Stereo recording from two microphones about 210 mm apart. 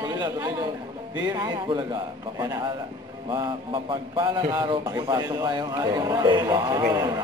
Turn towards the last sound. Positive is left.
turn(degrees=-15)  # may be behind; listen again after turning